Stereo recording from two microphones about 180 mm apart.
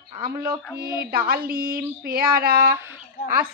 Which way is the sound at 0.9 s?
55° right (ahead or behind).